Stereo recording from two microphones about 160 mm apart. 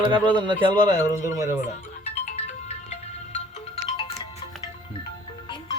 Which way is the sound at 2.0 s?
45° left (ahead or behind).